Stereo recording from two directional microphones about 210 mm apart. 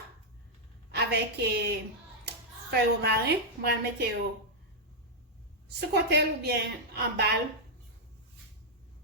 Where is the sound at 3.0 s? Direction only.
50° right (ahead or behind).